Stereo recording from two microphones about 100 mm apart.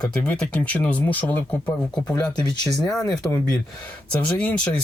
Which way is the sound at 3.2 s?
15° left (ahead or behind).